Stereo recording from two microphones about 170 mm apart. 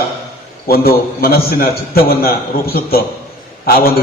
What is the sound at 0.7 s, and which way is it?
A man's voice, 60° left (ahead or behind).